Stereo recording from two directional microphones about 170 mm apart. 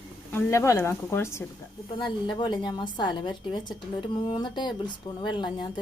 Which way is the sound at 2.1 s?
25° left (ahead or behind).